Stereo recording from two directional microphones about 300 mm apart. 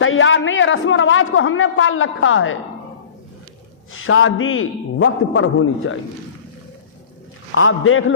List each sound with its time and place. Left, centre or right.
0.0 s a man's voice: left
3.9 s a man's voice: left
7.5 s a man's voice: left